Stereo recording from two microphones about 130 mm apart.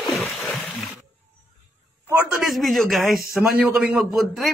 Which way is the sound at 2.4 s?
Centre (ahead or behind).